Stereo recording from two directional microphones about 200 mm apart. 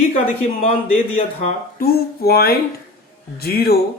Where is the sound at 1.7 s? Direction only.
50° left (ahead or behind).